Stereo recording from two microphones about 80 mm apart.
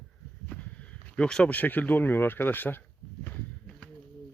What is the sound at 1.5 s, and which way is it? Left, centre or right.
Speech, left.